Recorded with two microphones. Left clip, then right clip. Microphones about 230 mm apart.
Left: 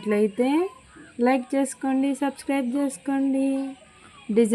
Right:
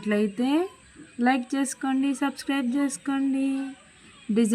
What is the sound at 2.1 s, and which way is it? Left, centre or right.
Speech, right.